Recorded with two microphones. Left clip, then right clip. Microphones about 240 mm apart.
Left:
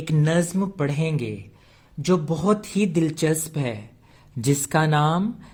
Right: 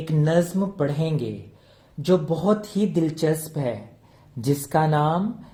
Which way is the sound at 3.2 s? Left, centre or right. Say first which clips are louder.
Even; left.